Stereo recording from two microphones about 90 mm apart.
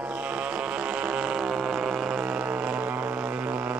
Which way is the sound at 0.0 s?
10° right (ahead or behind).